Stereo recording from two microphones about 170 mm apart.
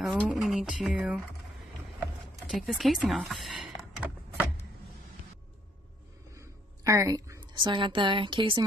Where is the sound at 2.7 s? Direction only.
Centre (ahead or behind).